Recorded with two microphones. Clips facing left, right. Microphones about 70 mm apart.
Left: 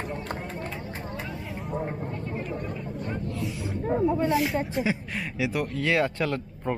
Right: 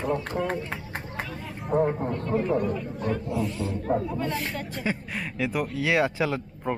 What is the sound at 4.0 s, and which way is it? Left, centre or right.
Speech, centre.